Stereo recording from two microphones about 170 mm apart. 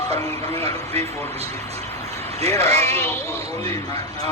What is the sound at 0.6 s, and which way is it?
Speech, 35° right (ahead or behind).